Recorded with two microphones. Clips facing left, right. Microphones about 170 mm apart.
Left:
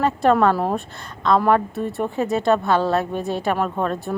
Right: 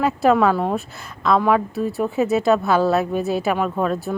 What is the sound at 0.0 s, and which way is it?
A woman's voice, 5° right (ahead or behind).